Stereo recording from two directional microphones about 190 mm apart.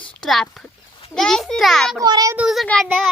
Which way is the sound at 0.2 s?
Centre (ahead or behind).